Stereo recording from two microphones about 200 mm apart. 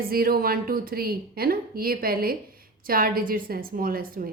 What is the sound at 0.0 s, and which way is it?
A woman's voice, 50° right (ahead or behind).